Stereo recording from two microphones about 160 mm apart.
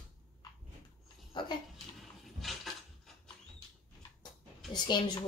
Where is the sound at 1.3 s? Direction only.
30° left (ahead or behind).